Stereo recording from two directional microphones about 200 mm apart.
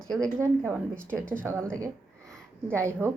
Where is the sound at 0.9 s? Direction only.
5° left (ahead or behind).